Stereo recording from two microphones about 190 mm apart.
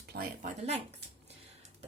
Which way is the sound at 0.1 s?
50° right (ahead or behind).